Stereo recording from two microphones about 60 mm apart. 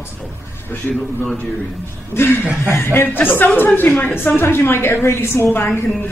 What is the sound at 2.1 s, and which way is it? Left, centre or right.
A woman's voice, left.